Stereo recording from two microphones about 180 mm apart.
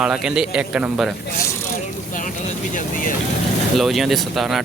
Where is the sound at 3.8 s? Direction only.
Centre (ahead or behind).